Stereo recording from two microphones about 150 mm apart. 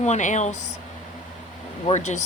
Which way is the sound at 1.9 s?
50° left (ahead or behind).